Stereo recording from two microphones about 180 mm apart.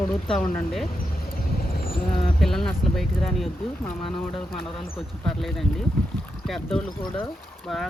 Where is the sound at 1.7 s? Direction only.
55° left (ahead or behind).